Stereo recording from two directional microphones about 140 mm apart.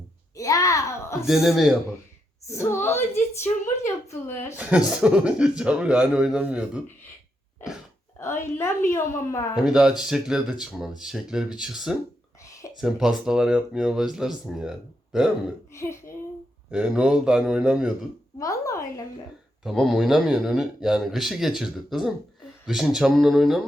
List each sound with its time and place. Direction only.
0.3 s a woman's voice: 25° left (ahead or behind)
1.2 s speech: centre (ahead or behind)
2.5 s speech: 20° left (ahead or behind)
4.0 s a woman's voice: 20° left (ahead or behind)
4.5 s speech: 10° right (ahead or behind)
8.2 s a woman's voice: 20° left (ahead or behind)
9.6 s speech: 5° right (ahead or behind)
12.4 s a sound: 20° left (ahead or behind)
12.7 s speech: 5° right (ahead or behind)
15.7 s a sound: 20° left (ahead or behind)
16.7 s speech: 5° right (ahead or behind)
18.3 s a sound: 25° left (ahead or behind)
19.6 s speech: centre (ahead or behind)